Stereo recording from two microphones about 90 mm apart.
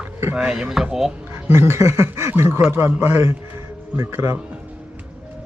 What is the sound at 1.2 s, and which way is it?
A man's voice, 30° right (ahead or behind).